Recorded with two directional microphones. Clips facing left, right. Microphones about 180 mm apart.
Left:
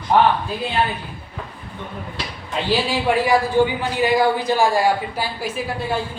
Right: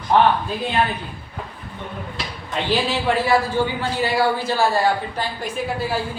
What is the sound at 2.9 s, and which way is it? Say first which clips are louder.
A woman's voice: left 2 dB; 15° left (ahead or behind).